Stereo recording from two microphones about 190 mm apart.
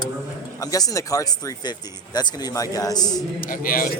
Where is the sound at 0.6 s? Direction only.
20° left (ahead or behind).